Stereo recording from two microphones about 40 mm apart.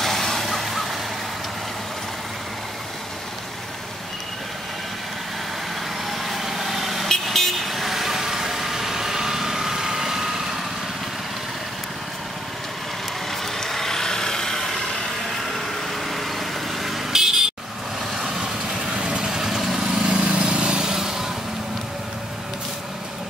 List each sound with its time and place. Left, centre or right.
0.0 s vehicle: centre
6.0 s vehicle: centre
13.3 s vehicle: centre
15.5 s vehicle: centre
17.1 s vehicle: centre
20.9 s vehicle: centre